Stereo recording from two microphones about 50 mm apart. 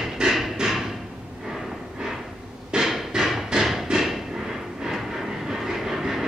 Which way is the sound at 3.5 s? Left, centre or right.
Centre.